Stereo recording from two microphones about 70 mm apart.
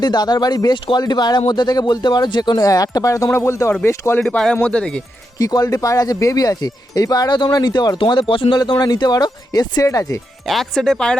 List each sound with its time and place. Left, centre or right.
0.0 s speech: left
3.3 s speech: left
4.2 s speech: centre
5.4 s speech: left
9.8 s speech: left
10.4 s speech: centre